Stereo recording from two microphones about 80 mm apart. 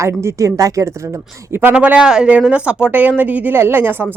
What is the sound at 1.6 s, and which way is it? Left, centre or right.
Speech, centre.